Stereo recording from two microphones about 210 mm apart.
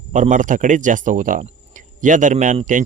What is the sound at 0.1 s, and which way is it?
Speech, 35° right (ahead or behind).